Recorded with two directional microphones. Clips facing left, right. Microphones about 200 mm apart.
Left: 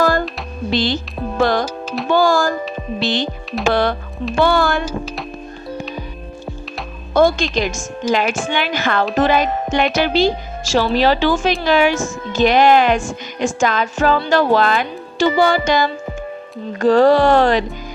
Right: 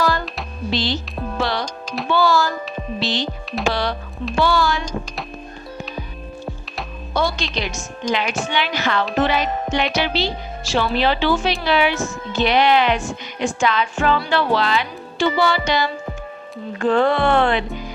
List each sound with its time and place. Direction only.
0.0 s music: 50° left (ahead or behind)
0.7 s a woman's voice: 50° left (ahead or behind)
1.6 s music: 5° left (ahead or behind)
2.0 s a woman's voice: 50° left (ahead or behind)
3.0 s music: 55° left (ahead or behind)
3.7 s a woman's voice: 55° left (ahead or behind)
4.4 s music: 55° left (ahead or behind)
7.1 s a woman's voice: 50° left (ahead or behind)
16.7 s music: 40° left (ahead or behind)